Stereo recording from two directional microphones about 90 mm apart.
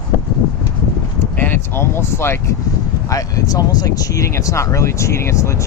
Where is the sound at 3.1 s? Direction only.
40° left (ahead or behind).